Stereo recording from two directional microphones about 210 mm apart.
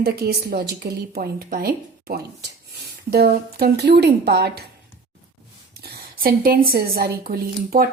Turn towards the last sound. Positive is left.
turn(degrees=-45)  # may be behind; listen again after turning